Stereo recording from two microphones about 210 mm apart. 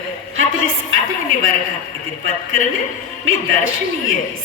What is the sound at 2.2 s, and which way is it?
A man's voice, 70° right (ahead or behind).